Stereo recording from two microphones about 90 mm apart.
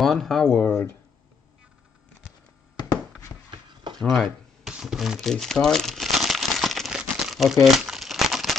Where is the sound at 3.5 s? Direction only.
65° right (ahead or behind).